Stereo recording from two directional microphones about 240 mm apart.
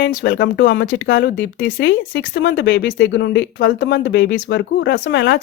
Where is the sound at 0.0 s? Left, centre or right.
Left.